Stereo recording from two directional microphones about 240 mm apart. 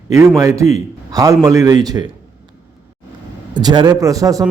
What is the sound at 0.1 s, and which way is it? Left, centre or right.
A man's voice, centre.